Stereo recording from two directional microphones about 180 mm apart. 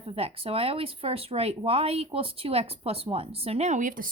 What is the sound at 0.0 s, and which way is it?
Speech, 35° right (ahead or behind).